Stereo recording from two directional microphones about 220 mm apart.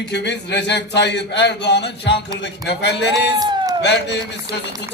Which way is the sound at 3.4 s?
15° right (ahead or behind).